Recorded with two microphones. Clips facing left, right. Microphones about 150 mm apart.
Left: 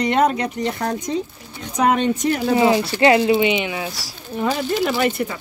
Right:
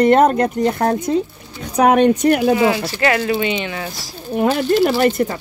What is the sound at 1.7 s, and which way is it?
Speech, 60° right (ahead or behind).